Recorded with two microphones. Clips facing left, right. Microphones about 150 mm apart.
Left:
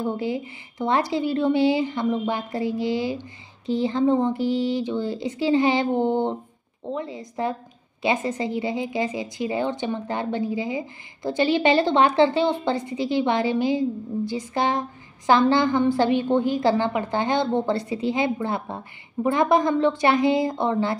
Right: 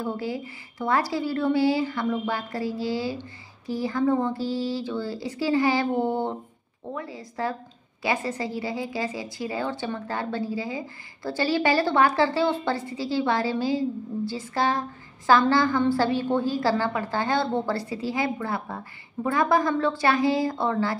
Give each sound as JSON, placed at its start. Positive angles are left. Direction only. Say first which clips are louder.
{"t": 0.0, "sound": "a woman's voice", "louder": "left 4 dB", "side_deg": 20}